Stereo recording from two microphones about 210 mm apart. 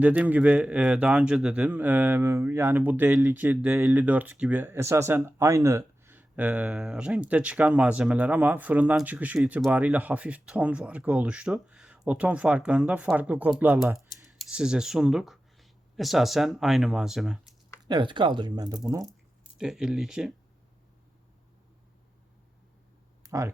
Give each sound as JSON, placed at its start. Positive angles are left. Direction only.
{"t": 0.0, "sound": "a man's voice", "side_deg": -5}
{"t": 17.8, "sound": "speech", "side_deg": -20}
{"t": 19.5, "sound": "speech", "side_deg": -5}
{"t": 23.2, "sound": "a sound", "side_deg": -15}